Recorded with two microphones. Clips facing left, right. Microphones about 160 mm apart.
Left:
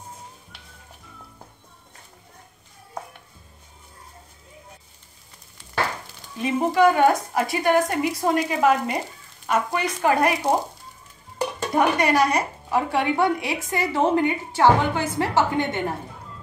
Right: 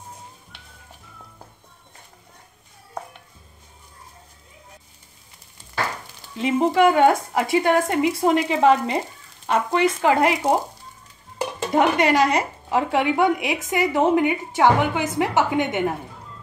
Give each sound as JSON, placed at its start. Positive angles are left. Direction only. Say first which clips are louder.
{"t": 6.3, "sound": "a woman's voice", "louder": "right 2 dB", "side_deg": -25}
{"t": 11.7, "sound": "a woman's voice", "louder": "right 2 dB", "side_deg": -20}